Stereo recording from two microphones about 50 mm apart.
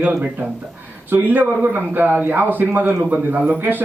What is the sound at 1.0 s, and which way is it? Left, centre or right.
A man's voice, right.